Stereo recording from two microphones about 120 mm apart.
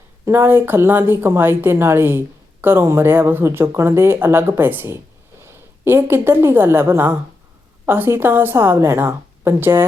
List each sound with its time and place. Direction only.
0.3 s a woman's voice: 20° right (ahead or behind)